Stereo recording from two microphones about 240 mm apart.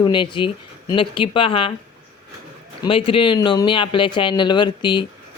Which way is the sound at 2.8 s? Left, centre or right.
Left.